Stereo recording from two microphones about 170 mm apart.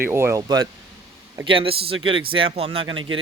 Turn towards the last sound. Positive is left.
turn(degrees=-30)  # may be behind; listen again after turning